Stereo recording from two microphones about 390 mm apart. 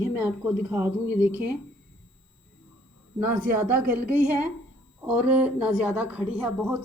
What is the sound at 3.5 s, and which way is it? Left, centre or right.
A woman's voice, centre.